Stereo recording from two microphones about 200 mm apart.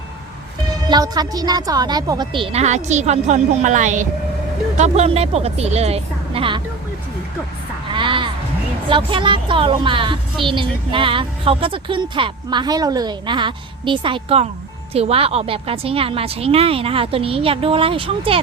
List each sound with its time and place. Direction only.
0.9 s a woman's voice: 20° right (ahead or behind)
7.9 s music: 25° right (ahead or behind)
8.9 s a woman's voice: 25° right (ahead or behind)